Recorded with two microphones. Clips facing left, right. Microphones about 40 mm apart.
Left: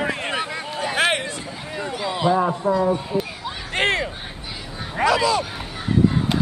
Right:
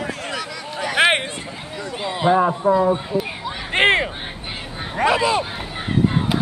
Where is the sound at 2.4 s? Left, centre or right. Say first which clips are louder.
Right 3 dB; centre.